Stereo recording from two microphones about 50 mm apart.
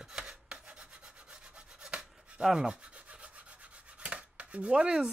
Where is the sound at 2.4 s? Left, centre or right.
Centre.